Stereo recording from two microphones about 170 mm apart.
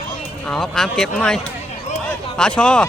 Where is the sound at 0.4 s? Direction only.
5° left (ahead or behind).